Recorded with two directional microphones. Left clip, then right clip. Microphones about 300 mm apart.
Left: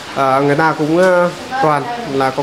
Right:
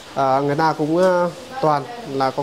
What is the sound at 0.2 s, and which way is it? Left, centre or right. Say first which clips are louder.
Speech: left 5 dB; centre.